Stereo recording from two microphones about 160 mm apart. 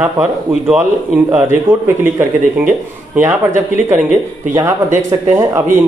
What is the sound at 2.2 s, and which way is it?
Speech, 15° right (ahead or behind).